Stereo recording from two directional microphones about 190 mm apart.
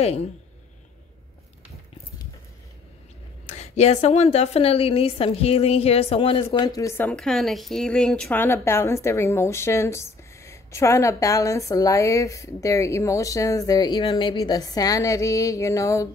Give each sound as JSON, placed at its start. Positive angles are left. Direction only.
{"t": 0.0, "sound": "a woman's voice", "side_deg": 35}
{"t": 3.4, "sound": "a woman's voice", "side_deg": 35}
{"t": 6.4, "sound": "a woman's voice", "side_deg": 20}